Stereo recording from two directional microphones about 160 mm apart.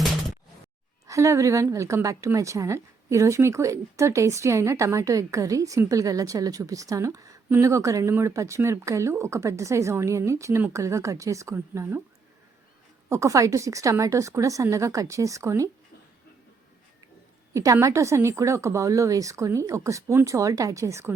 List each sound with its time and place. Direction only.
1.0 s a woman's voice: 20° right (ahead or behind)
13.1 s a woman's voice: 20° right (ahead or behind)
17.5 s a woman's voice: 20° right (ahead or behind)